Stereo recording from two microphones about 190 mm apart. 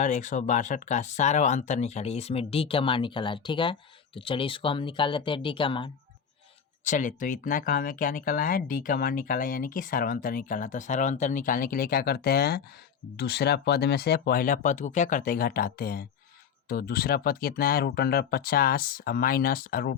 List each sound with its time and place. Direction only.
0.0 s speech: 40° left (ahead or behind)
6.8 s speech: 40° left (ahead or behind)